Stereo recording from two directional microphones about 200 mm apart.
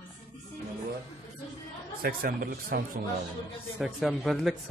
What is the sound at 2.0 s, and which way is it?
Speech, 45° right (ahead or behind).